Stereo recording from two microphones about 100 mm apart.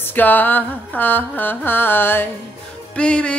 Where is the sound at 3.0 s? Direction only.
10° left (ahead or behind).